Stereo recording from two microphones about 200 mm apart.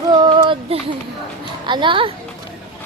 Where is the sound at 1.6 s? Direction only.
25° right (ahead or behind).